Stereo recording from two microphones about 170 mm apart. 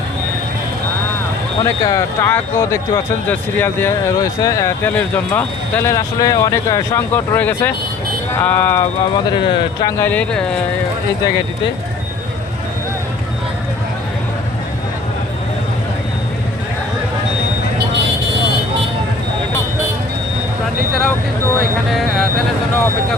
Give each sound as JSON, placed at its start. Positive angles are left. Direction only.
{"t": 1.6, "sound": "speech", "side_deg": 15}
{"t": 9.1, "sound": "speech", "side_deg": 25}
{"t": 10.0, "sound": "speech", "side_deg": 10}
{"t": 21.8, "sound": "a sound", "side_deg": 0}